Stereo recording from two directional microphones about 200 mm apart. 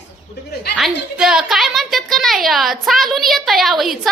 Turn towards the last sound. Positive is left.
turn(degrees=0)  # may be behind; listen again after turning